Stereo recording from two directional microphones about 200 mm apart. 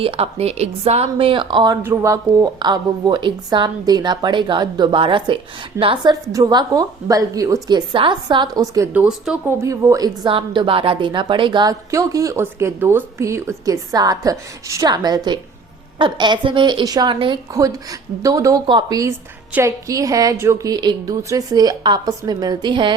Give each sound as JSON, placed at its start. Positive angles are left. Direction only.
{"t": 0.0, "sound": "a woman's voice", "side_deg": -30}